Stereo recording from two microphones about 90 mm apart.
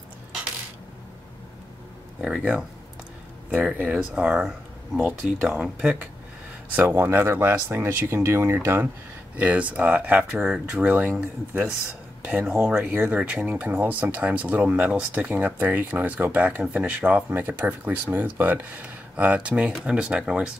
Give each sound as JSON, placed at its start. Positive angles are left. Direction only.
{"t": 2.2, "sound": "speech", "side_deg": -5}
{"t": 3.4, "sound": "speech", "side_deg": -20}